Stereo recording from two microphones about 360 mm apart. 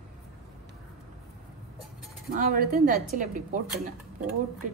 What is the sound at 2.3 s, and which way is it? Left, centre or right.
Speech, right.